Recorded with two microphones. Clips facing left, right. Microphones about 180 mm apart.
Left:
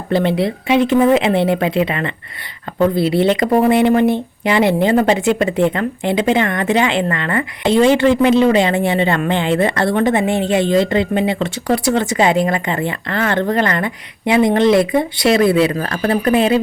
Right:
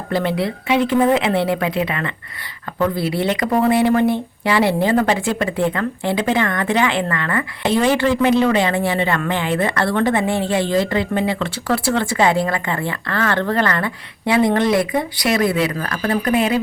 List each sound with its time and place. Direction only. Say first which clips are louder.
0.1 s speech: left 4 dB; 20° left (ahead or behind)